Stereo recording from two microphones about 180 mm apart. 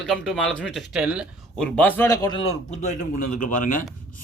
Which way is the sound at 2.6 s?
40° left (ahead or behind).